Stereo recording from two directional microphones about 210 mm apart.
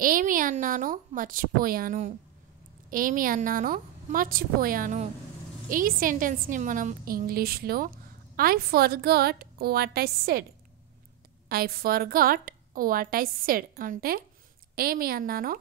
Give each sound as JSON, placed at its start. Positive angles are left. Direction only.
{"t": 0.0, "sound": "a woman's voice", "side_deg": -40}
{"t": 11.4, "sound": "a woman's voice", "side_deg": -45}